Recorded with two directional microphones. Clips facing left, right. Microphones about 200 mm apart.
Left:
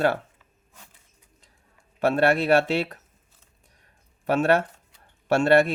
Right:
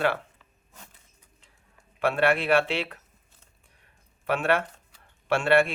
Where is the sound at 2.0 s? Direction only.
40° left (ahead or behind).